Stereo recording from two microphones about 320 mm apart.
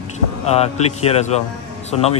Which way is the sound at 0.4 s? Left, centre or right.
Centre.